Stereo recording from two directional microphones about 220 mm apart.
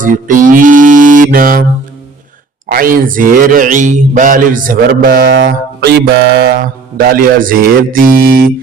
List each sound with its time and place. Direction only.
0.0 s mantra: 40° right (ahead or behind)
2.6 s mantra: 40° right (ahead or behind)
5.3 s mantra: 55° right (ahead or behind)